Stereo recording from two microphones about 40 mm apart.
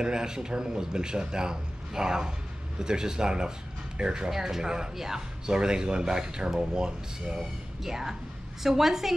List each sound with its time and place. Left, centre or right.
0.0 s speech: centre